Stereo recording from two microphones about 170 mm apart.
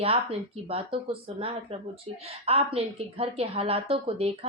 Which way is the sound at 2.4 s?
35° right (ahead or behind).